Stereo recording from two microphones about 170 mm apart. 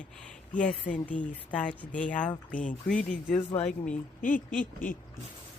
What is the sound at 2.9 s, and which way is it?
Speech, 5° left (ahead or behind).